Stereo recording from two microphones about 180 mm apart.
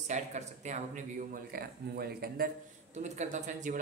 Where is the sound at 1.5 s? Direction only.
60° right (ahead or behind).